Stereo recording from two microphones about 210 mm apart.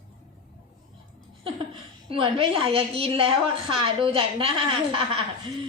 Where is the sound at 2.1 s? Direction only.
25° right (ahead or behind).